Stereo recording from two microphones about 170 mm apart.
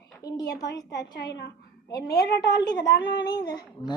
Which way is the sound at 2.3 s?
80° left.